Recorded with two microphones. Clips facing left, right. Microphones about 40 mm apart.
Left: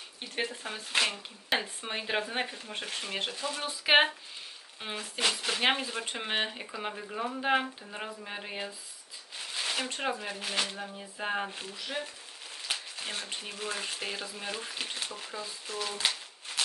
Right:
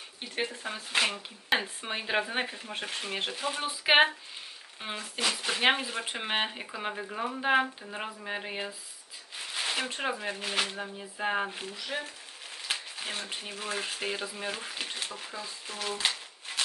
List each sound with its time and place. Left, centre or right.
0.4 s speech: centre
2.0 s speech: centre
3.3 s speech: right
3.8 s speech: centre
9.5 s shuffling cards: centre
10.0 s speech: centre
12.6 s a sound: centre
13.3 s speech: centre
15.9 s a sound: centre